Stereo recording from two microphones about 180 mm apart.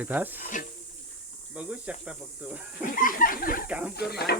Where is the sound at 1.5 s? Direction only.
5° right (ahead or behind).